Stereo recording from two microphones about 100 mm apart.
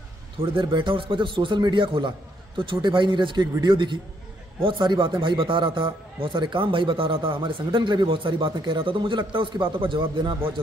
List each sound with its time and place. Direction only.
0.4 s a man's voice: 60° right (ahead or behind)